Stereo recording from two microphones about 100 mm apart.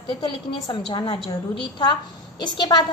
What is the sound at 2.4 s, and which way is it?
Speech, 50° left (ahead or behind).